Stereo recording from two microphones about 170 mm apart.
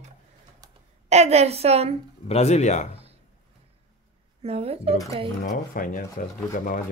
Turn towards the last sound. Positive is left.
turn(degrees=50)  # may be behind; listen again after turning